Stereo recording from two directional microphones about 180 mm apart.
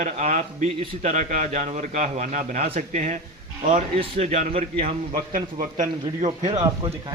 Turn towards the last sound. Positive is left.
turn(degrees=-25)  # may be behind; listen again after turning